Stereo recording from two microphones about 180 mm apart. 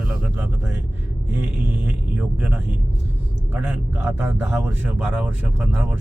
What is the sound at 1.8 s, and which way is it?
Speech, 10° right (ahead or behind).